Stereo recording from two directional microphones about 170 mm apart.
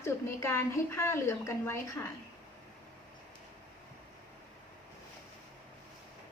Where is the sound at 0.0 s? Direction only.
15° left (ahead or behind).